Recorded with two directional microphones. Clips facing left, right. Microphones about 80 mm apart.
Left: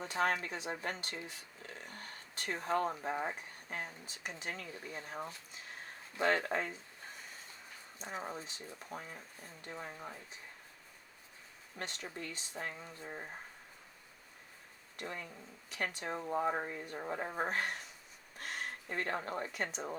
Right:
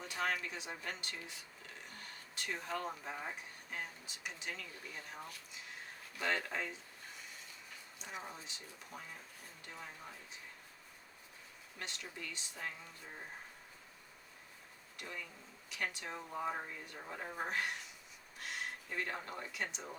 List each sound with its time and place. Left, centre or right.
0.0 s speech: left
7.9 s speech: left
11.8 s speech: left
14.9 s speech: left